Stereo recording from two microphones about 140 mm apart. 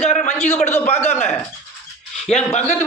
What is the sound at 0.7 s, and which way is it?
Speech, 15° left (ahead or behind).